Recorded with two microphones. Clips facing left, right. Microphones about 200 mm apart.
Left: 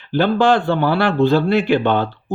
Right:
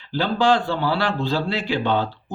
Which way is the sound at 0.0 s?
55° left (ahead or behind).